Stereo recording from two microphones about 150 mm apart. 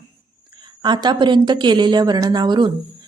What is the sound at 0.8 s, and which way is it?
A woman's voice, 30° right (ahead or behind).